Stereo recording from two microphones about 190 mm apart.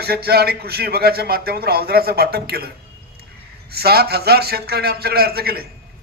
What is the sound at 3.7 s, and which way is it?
A man's voice, 55° right (ahead or behind).